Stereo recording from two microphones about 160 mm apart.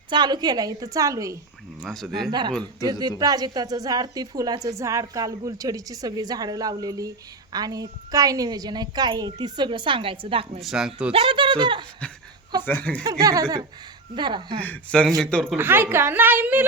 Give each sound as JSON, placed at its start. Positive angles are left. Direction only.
{"t": 0.1, "sound": "a woman's voice", "side_deg": -25}
{"t": 1.8, "sound": "speech", "side_deg": 5}
{"t": 3.2, "sound": "a woman's voice", "side_deg": -25}
{"t": 10.6, "sound": "speech", "side_deg": 0}
{"t": 11.1, "sound": "speech", "side_deg": -35}
{"t": 12.6, "sound": "speech", "side_deg": 10}
{"t": 13.1, "sound": "a woman's voice", "side_deg": -20}
{"t": 14.6, "sound": "speech", "side_deg": 10}
{"t": 15.5, "sound": "a woman's voice", "side_deg": -15}